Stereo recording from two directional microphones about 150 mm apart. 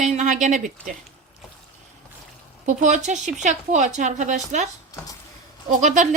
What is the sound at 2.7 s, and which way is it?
Speech, 55° right (ahead or behind).